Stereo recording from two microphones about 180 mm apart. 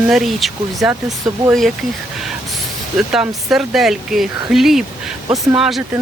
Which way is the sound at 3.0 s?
5° right (ahead or behind).